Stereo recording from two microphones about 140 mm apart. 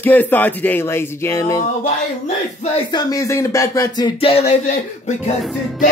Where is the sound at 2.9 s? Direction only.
25° left (ahead or behind).